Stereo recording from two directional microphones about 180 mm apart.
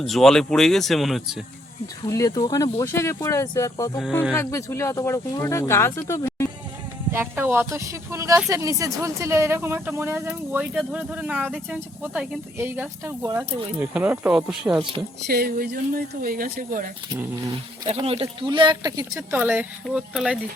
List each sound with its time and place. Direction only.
0.0 s speech: centre (ahead or behind)
2.0 s speech: 20° left (ahead or behind)
7.1 s speech: 15° right (ahead or behind)
15.3 s speech: 55° right (ahead or behind)
17.8 s speech: 35° right (ahead or behind); by 20.4 s 5° right (ahead or behind)